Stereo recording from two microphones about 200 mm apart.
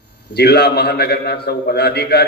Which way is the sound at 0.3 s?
55° left (ahead or behind).